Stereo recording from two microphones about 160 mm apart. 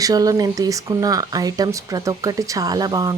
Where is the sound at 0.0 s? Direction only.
20° right (ahead or behind).